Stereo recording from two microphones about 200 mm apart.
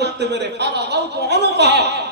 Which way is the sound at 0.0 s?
55° right (ahead or behind).